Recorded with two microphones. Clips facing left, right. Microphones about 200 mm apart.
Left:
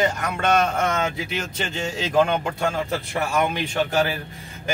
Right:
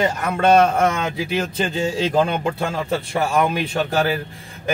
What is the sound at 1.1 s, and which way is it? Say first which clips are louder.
Speech: right 6 dB; 30° right (ahead or behind).